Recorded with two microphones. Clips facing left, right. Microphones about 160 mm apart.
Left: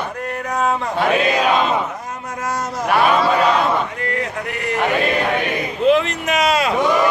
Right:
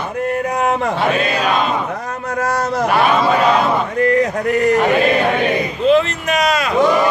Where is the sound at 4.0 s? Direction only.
40° right (ahead or behind).